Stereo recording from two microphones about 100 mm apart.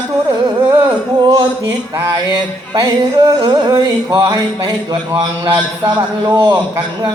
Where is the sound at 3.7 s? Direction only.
35° right (ahead or behind).